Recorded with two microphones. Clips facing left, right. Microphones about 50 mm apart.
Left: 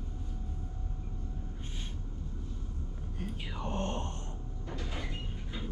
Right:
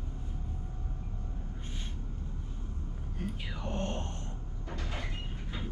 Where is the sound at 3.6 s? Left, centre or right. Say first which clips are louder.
Left 1 dB; left.